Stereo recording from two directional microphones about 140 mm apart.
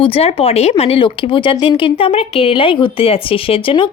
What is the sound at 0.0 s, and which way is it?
Speech, 45° left (ahead or behind).